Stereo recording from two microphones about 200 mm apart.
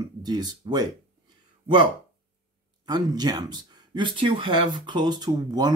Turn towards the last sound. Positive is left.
turn(degrees=-20)  # may be behind; listen again after turning